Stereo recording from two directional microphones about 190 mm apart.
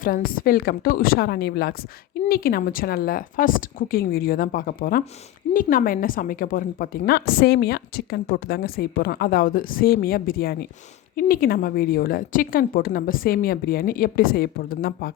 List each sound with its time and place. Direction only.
0.0 s a woman's voice: 50° left (ahead or behind)